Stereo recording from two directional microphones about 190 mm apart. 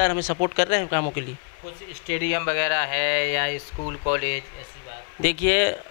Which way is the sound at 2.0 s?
15° left (ahead or behind).